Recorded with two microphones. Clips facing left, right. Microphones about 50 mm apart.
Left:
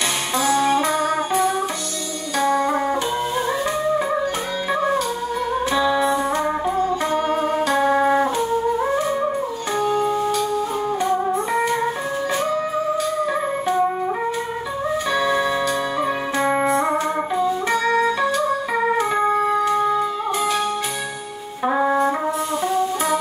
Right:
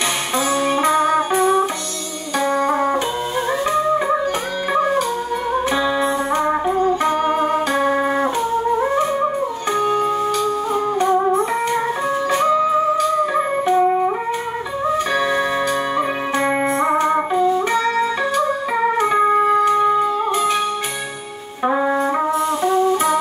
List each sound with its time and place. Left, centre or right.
0.5 s music: centre
5.8 s music: right
6.3 s music: centre
7.1 s organ: centre
7.7 s music: centre
13.2 s music: centre
15.1 s music: right
18.9 s organ: centre
19.7 s music: centre
21.6 s brass instrument: centre
22.6 s music: centre